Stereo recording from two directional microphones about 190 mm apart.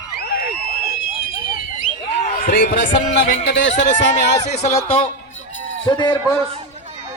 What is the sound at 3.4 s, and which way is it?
Speech, 70° left (ahead or behind).